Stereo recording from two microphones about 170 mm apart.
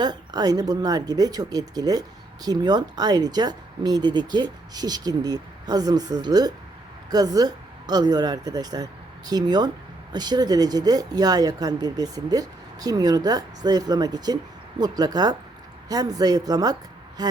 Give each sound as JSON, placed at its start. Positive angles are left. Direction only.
{"t": 0.0, "sound": "speech", "side_deg": -25}